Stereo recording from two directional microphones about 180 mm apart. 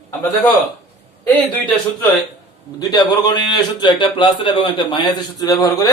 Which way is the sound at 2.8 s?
25° left (ahead or behind).